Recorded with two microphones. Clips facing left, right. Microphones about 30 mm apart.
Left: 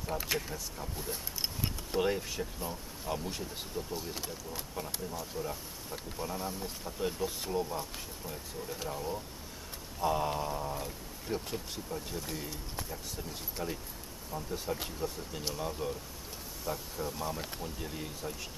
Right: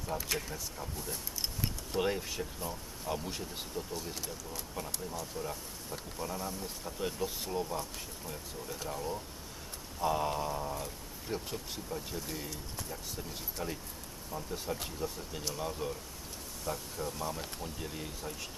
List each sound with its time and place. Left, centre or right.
0.4 s speech: centre
0.9 s a sound: centre
2.0 s speech: centre
3.9 s speech: centre
8.8 s speech: centre